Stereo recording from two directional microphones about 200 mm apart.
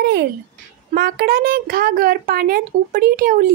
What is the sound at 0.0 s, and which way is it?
A child's voice, 55° right (ahead or behind).